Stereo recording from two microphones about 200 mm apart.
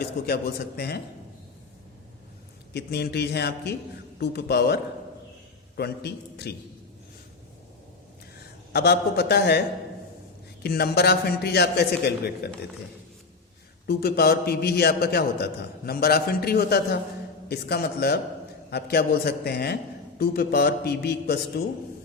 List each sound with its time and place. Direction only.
0.2 s a man's voice: 55° left (ahead or behind)
2.7 s a man's voice: 55° left (ahead or behind)
8.7 s a man's voice: 55° left (ahead or behind)
13.8 s a man's voice: 50° left (ahead or behind)